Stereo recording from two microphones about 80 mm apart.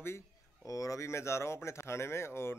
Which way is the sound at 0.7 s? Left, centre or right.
Left.